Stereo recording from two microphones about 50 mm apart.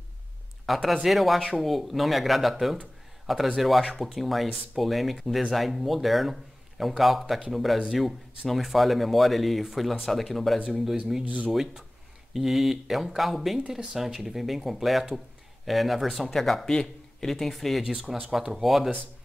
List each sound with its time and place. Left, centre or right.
0.7 s speech: centre
11.2 s speech: right
11.5 s speech: centre